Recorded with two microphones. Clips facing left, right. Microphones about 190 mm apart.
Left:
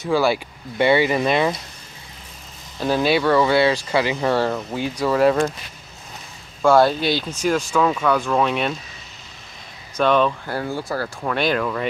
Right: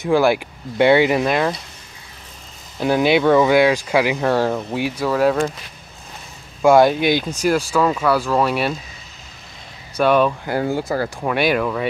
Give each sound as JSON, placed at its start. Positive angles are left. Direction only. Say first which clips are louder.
{"t": 0.0, "sound": "speech", "louder": "right 3 dB", "side_deg": -15}
{"t": 1.2, "sound": "speech", "louder": "even", "side_deg": 0}
{"t": 2.8, "sound": "speech", "louder": "right 3 dB", "side_deg": -15}
{"t": 5.0, "sound": "speech", "louder": "left 1 dB", "side_deg": 0}
{"t": 6.6, "sound": "speech", "louder": "right 3 dB", "side_deg": -10}
{"t": 9.9, "sound": "speech", "louder": "right 2 dB", "side_deg": -10}
{"t": 10.6, "sound": "speech", "louder": "right 5 dB", "side_deg": -20}
{"t": 11.2, "sound": "speech", "louder": "right 2 dB", "side_deg": -10}